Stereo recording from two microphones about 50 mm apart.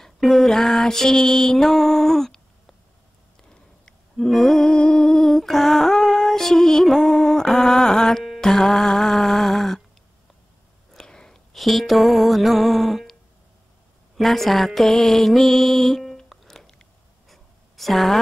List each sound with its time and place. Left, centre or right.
0.0 s mantra: centre
3.8 s a sound: centre
7.1 s music: centre
10.9 s chewing: centre
11.5 s mantra: centre
14.1 s mantra: centre
16.3 s music: centre
17.3 s a sound: centre